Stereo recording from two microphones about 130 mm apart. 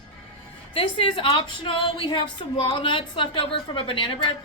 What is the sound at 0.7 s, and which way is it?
A woman's voice, 45° left (ahead or behind).